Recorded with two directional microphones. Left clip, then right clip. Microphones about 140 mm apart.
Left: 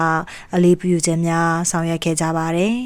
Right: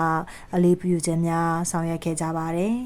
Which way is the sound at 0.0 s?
20° left (ahead or behind).